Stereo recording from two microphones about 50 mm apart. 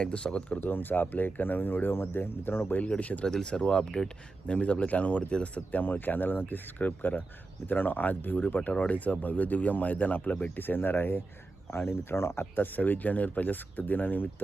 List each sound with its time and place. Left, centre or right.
0.0 s speech: left
0.6 s speech: left
3.2 s speech: centre; by 10.6 s left
10.6 s speech: left
12.5 s speech: left